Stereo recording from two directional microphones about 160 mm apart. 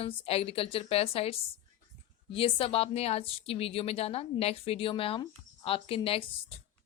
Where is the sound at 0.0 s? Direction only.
35° left (ahead or behind).